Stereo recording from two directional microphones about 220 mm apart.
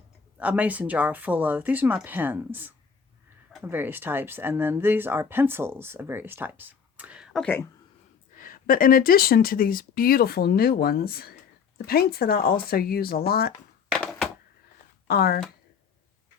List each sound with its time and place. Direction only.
0.3 s speech: 5° right (ahead or behind)
8.4 s speech: 40° left (ahead or behind)
13.9 s a sound: centre (ahead or behind)
15.0 s speech: 45° left (ahead or behind)